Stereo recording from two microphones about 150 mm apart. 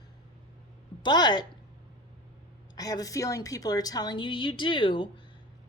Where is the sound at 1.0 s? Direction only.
30° left (ahead or behind).